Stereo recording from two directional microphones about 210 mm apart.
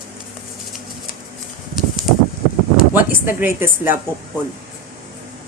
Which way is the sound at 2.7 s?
40° left (ahead or behind).